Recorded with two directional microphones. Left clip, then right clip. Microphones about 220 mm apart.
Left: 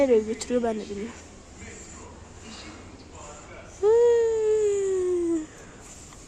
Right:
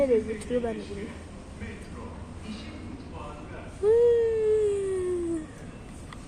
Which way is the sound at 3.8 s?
25° left (ahead or behind).